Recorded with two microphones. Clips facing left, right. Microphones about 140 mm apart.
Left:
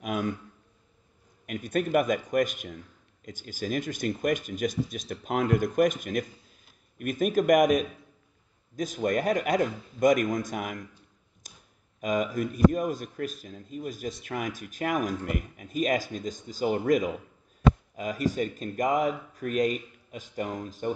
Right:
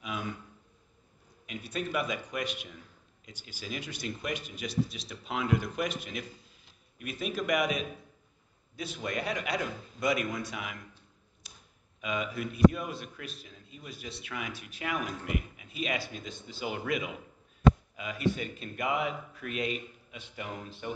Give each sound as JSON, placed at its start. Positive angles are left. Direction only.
{"t": 0.0, "sound": "a man's voice", "side_deg": 50}
{"t": 1.4, "sound": "a man's voice", "side_deg": 50}
{"t": 11.4, "sound": "a sound", "side_deg": 45}
{"t": 12.0, "sound": "a man's voice", "side_deg": 45}